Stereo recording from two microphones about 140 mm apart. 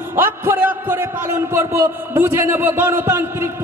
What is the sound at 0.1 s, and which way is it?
A man's voice, 15° right (ahead or behind).